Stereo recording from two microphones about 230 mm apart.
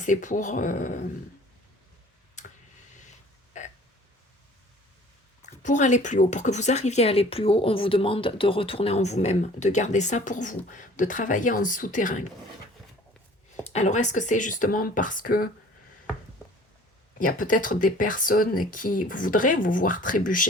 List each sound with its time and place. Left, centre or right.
0.0 s speech: left
5.4 s speech: left
13.7 s speech: left
17.2 s speech: left